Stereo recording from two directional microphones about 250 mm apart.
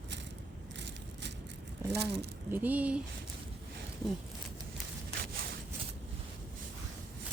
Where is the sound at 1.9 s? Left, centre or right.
Right.